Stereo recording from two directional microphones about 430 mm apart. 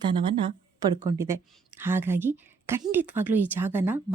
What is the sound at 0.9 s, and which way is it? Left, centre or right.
A woman's voice, centre.